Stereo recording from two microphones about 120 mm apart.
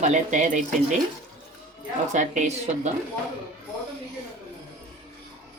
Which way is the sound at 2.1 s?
80° right.